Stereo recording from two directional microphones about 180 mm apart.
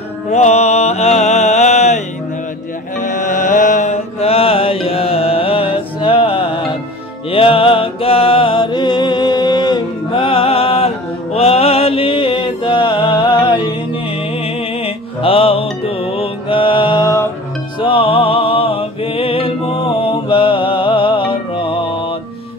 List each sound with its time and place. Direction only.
0.3 s music: 40° left (ahead or behind)
3.0 s mantra: 45° left (ahead or behind)
7.2 s music: 30° left (ahead or behind)
17.7 s music: 30° left (ahead or behind)